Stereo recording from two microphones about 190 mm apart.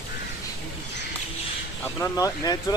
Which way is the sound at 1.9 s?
15° left (ahead or behind).